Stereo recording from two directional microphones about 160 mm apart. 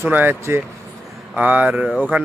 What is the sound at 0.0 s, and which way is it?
A man's voice, 10° right (ahead or behind).